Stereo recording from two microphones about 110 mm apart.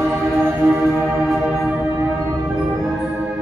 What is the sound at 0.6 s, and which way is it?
Music, 25° right (ahead or behind).